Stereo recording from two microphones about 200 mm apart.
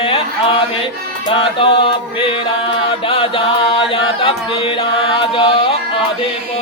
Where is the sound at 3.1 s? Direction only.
25° left (ahead or behind).